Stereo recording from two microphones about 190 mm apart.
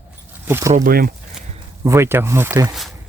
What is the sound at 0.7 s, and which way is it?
Speech, 50° right (ahead or behind).